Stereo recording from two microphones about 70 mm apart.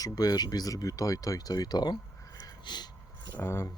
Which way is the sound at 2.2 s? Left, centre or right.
Left.